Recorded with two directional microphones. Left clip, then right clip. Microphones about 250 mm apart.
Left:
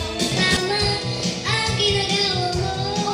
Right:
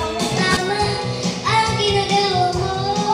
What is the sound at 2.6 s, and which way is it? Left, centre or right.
Music, centre.